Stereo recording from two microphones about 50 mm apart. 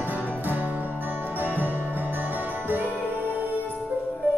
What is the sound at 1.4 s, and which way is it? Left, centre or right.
Music, right.